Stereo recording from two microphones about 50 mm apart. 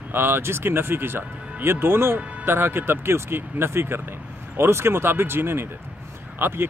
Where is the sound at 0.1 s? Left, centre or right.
Right.